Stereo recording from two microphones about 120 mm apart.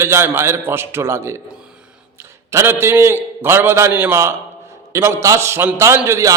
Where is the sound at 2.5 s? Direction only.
20° right (ahead or behind).